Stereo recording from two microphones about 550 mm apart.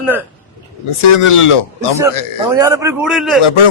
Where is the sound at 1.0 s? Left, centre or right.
Left.